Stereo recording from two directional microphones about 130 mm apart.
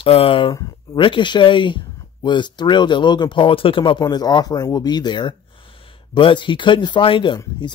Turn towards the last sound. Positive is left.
turn(degrees=35)  # may be behind; listen again after turning